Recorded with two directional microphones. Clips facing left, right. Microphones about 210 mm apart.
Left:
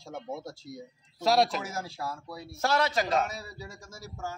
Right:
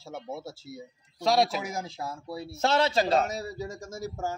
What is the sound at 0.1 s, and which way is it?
Speech, 5° right (ahead or behind).